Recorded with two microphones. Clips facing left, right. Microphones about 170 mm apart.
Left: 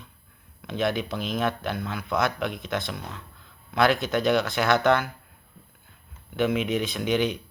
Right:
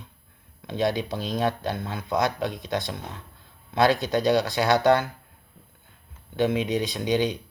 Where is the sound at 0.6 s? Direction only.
15° right (ahead or behind).